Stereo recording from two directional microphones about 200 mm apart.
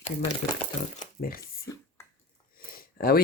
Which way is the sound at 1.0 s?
45° left (ahead or behind).